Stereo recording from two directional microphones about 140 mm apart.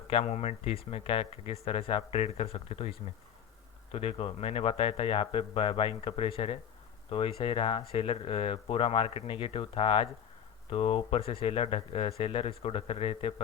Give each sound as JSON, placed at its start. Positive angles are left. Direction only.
{"t": 0.1, "sound": "speech", "side_deg": 45}
{"t": 3.9, "sound": "speech", "side_deg": 45}